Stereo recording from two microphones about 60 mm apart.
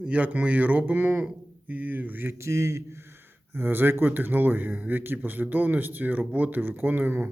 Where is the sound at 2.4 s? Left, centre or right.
Right.